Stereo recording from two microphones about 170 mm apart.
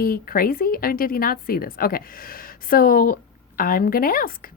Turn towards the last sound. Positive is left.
turn(degrees=60)  # may be behind; listen again after turning